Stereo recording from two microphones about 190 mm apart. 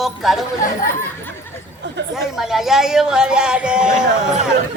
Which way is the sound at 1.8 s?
65° right (ahead or behind).